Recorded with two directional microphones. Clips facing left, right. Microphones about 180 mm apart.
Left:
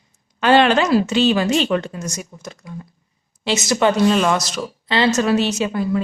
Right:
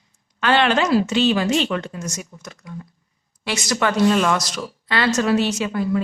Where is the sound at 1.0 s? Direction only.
40° left (ahead or behind).